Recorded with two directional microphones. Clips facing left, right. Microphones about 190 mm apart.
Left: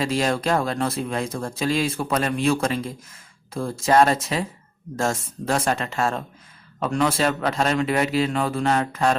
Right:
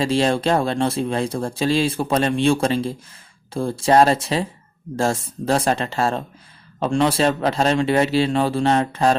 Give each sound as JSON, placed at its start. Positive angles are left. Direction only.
{"t": 0.0, "sound": "speech", "side_deg": -30}